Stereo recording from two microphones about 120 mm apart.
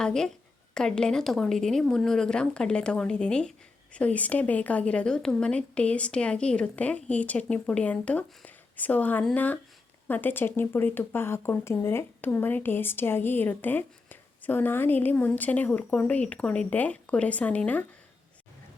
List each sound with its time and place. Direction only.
0.0 s speech: 5° left (ahead or behind)